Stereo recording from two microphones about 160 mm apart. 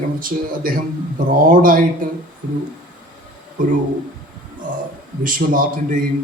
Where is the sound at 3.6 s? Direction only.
55° right (ahead or behind).